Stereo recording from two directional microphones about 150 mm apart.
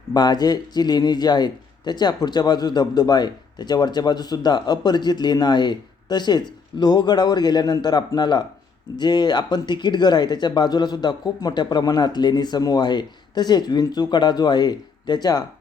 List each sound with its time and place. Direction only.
0.1 s speech: 25° left (ahead or behind)